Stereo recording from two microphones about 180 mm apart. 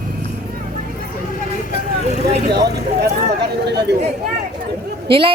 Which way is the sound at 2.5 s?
65° right (ahead or behind).